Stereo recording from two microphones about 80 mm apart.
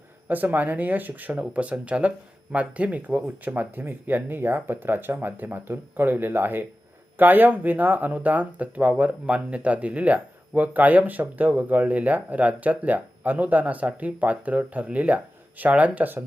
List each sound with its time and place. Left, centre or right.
0.3 s speech: right